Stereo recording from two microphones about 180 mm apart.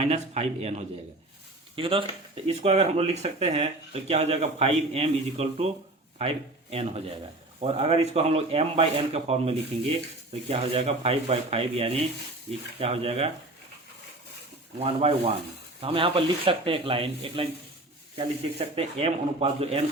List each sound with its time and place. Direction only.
0.0 s speech: 35° right (ahead or behind)
14.8 s speech: 30° right (ahead or behind)
18.8 s speech: 35° right (ahead or behind)